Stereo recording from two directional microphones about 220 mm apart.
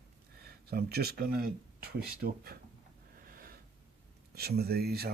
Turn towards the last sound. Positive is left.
turn(degrees=-45)  # may be behind; listen again after turning